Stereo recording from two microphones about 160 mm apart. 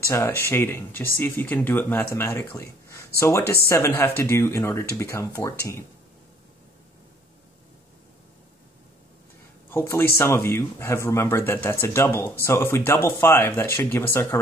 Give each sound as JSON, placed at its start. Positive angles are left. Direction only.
{"t": 0.0, "sound": "speech", "side_deg": 15}
{"t": 9.7, "sound": "speech", "side_deg": 15}